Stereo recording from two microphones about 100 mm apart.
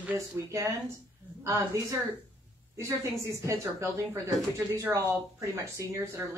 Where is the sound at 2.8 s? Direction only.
30° right (ahead or behind).